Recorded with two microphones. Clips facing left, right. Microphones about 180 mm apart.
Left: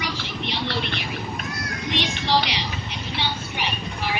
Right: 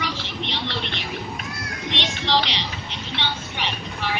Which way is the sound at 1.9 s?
10° left (ahead or behind).